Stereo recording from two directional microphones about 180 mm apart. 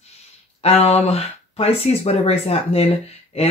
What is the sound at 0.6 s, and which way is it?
Speech, 35° left (ahead or behind).